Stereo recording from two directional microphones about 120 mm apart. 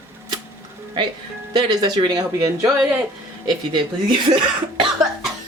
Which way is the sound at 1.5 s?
40° right (ahead or behind).